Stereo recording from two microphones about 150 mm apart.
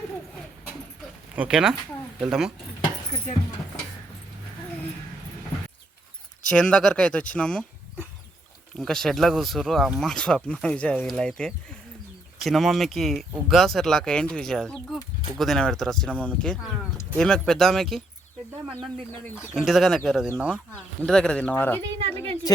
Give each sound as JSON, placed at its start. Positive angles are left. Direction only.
{"t": 1.4, "sound": "speech", "side_deg": -5}
{"t": 6.5, "sound": "speech", "side_deg": 5}
{"t": 8.7, "sound": "speech", "side_deg": 5}
{"t": 18.8, "sound": "speech", "side_deg": 10}
{"t": 19.5, "sound": "speech", "side_deg": 0}
{"t": 20.3, "sound": "speech", "side_deg": -10}
{"t": 21.0, "sound": "speech", "side_deg": 5}
{"t": 21.9, "sound": "a woman's voice", "side_deg": -40}